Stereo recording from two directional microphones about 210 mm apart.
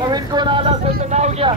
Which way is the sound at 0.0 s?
20° right (ahead or behind).